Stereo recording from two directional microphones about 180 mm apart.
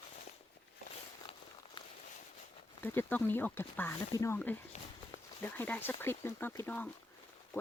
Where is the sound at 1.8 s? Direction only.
25° left (ahead or behind).